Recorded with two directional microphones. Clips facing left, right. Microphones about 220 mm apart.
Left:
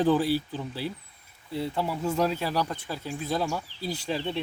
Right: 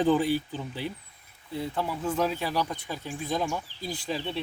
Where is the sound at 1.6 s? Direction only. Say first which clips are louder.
Left 1 dB; 10° left (ahead or behind).